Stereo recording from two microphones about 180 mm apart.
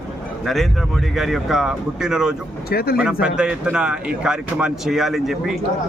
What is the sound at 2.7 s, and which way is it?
Speech, 60° left (ahead or behind).